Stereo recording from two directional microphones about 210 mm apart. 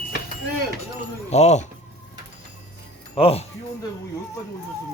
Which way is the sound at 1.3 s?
35° left (ahead or behind).